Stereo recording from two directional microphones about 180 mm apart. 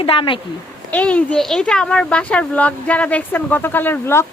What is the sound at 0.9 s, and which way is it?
A child's voice, 10° left (ahead or behind).